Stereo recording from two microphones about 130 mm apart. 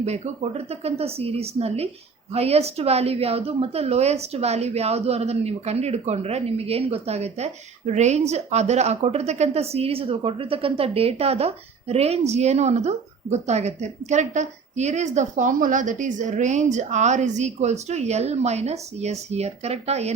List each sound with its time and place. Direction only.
0.0 s a woman's voice: 55° right (ahead or behind)